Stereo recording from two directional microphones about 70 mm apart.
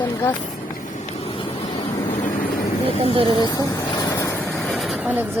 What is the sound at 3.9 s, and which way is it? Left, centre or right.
Vehicle, left.